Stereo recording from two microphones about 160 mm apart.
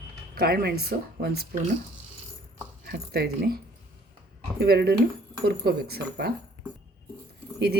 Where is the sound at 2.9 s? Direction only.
75° right (ahead or behind).